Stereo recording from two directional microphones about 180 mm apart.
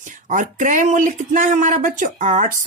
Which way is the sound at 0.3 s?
45° right (ahead or behind).